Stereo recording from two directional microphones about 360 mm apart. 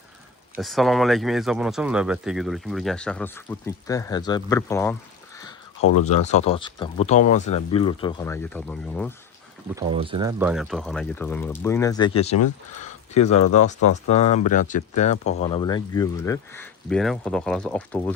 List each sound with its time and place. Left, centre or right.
0.5 s speech: centre
6.1 s speech: centre
9.7 s speech: centre
13.3 s speech: left
14.1 s speech: centre